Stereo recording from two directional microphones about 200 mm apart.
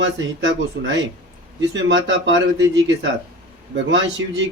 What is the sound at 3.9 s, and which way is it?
Speech, 65° right (ahead or behind).